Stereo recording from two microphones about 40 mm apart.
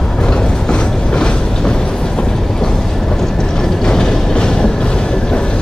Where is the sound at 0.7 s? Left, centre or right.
Left.